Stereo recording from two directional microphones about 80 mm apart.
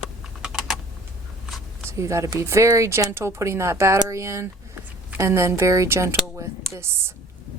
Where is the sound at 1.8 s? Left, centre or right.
Right.